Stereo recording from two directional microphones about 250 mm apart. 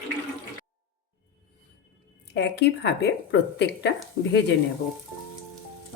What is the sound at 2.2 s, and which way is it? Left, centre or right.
Speech, left.